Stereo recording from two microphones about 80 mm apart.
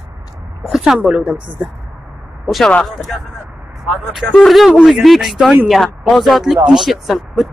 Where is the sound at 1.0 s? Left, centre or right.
Centre.